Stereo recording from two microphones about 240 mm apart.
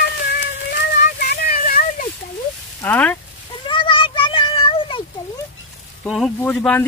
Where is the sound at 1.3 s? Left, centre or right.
Left.